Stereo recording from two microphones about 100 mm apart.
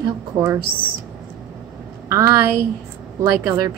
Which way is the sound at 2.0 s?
30° right (ahead or behind).